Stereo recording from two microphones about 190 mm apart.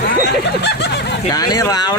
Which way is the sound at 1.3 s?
20° left (ahead or behind).